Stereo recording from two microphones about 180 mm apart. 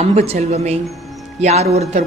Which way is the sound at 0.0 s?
35° right (ahead or behind).